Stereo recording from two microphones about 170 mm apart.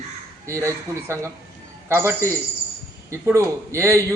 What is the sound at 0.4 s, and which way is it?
A man's voice, 15° right (ahead or behind).